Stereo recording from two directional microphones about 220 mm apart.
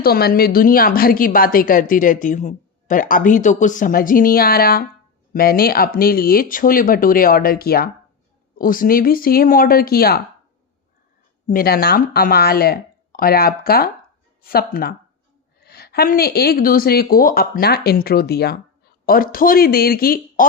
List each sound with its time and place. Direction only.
0.0 s a woman's voice: 45° left (ahead or behind)
11.4 s a woman's voice: 40° left (ahead or behind)